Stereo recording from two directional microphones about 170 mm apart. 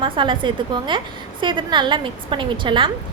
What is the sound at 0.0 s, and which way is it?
A woman's voice, 30° right (ahead or behind).